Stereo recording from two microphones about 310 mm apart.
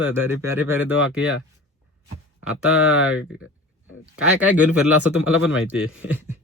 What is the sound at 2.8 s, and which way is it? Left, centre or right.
Speech, left.